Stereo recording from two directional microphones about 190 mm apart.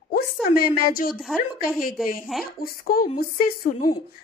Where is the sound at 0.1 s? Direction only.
50° left (ahead or behind).